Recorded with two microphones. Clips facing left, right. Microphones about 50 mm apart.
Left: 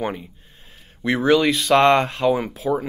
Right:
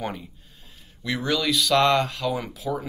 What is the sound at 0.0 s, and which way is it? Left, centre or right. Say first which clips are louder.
Speech: left 5 dB; left.